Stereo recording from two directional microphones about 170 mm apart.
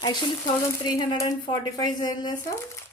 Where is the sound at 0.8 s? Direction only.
25° left (ahead or behind).